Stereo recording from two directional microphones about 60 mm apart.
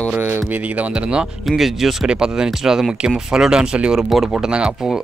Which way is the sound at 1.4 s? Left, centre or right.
Centre.